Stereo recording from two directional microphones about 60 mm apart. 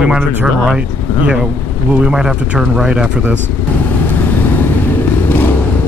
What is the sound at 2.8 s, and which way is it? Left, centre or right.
Speech, centre.